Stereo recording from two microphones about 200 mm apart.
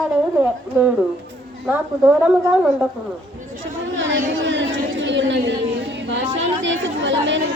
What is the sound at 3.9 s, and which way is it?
Chatter, 70° right (ahead or behind).